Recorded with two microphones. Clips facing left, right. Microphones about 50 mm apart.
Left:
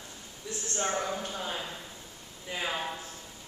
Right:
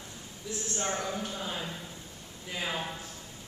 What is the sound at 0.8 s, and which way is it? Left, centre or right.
Speech, centre.